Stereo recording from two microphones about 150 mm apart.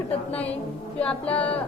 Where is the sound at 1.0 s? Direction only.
10° left (ahead or behind).